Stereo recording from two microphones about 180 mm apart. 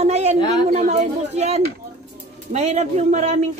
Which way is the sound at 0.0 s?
35° right (ahead or behind).